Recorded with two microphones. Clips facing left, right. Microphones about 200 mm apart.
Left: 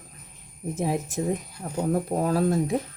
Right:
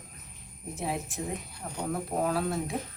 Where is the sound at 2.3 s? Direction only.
40° left (ahead or behind).